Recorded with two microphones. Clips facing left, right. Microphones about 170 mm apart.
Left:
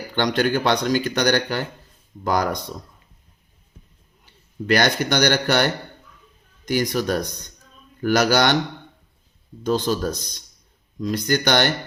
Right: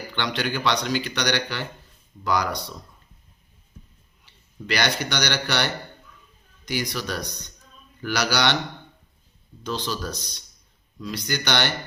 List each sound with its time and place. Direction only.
0.1 s speech: 45° left (ahead or behind)
4.3 s a man's voice: 45° left (ahead or behind)
9.6 s speech: 50° left (ahead or behind)